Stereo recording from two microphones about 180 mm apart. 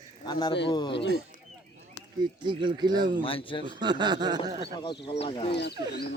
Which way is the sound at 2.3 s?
25° right (ahead or behind).